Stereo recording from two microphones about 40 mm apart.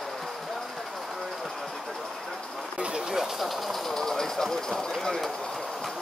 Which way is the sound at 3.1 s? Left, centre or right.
Centre.